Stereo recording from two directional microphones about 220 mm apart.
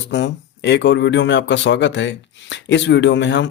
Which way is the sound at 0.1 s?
55° left (ahead or behind).